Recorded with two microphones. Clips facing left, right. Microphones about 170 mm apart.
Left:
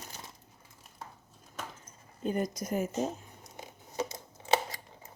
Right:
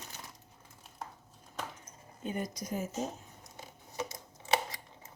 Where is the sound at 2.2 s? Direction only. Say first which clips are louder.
Left 5 dB; 40° left (ahead or behind); by 2.9 s 60° left (ahead or behind).